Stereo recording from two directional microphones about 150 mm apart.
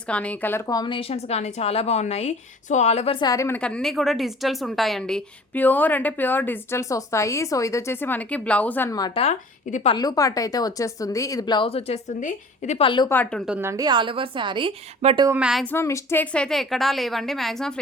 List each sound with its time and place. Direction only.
0.1 s a woman's voice: 10° left (ahead or behind)
0.7 s a woman's voice: 30° left (ahead or behind); by 3.2 s 45° left (ahead or behind)
3.2 s speech: 25° left (ahead or behind)
3.6 s a woman's voice: 5° left (ahead or behind)
9.1 s a woman's voice: 45° left (ahead or behind)
9.9 s speech: 25° left (ahead or behind); by 12.8 s 50° left (ahead or behind)
12.8 s speech: 35° left (ahead or behind)
13.1 s a woman's voice: 10° left (ahead or behind)
13.6 s a woman's voice: 20° right (ahead or behind)
15.3 s a woman's voice: 5° right (ahead or behind)
15.6 s a woman's voice: 15° left (ahead or behind)